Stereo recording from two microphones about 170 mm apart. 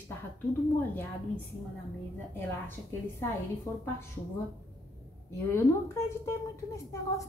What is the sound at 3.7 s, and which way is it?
Speech, 15° left (ahead or behind).